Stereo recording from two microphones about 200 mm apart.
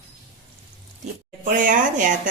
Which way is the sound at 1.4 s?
40° right (ahead or behind).